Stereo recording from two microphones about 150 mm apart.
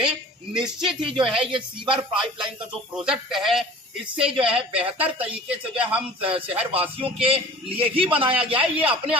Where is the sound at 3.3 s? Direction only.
Centre (ahead or behind).